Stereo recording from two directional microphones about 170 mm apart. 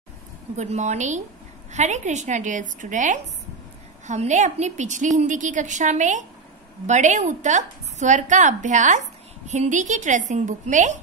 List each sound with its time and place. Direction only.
0.6 s a woman's voice: 45° right (ahead or behind)